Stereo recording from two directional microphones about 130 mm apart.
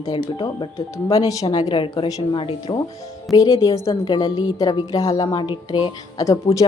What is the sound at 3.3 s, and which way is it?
A woman's voice, 25° left (ahead or behind).